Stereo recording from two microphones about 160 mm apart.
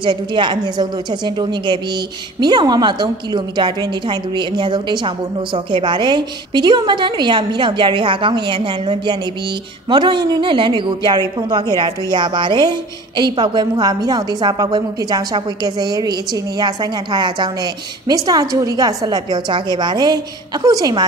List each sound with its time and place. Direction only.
0.0 s a woman's voice: 30° right (ahead or behind)